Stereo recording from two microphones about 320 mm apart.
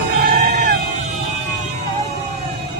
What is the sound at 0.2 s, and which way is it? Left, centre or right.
Sheep, right.